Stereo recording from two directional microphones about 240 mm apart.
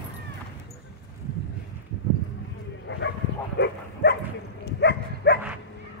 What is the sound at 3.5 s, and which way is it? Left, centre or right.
Dog, left.